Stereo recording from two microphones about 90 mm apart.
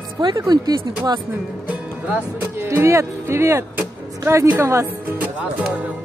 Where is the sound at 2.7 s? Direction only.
30° right (ahead or behind).